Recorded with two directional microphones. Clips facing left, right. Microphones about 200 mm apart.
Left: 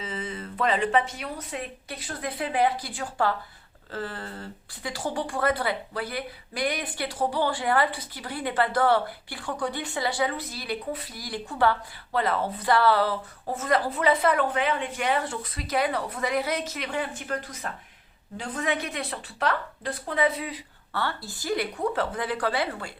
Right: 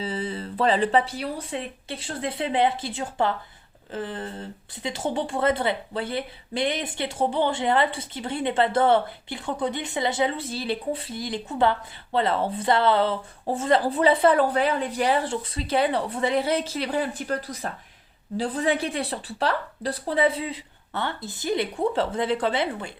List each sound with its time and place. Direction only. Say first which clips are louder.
0.0 s speech: right 5 dB; 35° right (ahead or behind)